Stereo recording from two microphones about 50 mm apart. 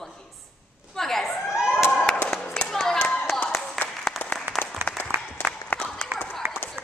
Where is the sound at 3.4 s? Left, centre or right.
Centre.